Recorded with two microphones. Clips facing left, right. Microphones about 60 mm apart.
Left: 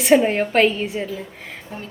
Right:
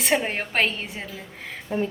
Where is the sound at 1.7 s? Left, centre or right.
Right.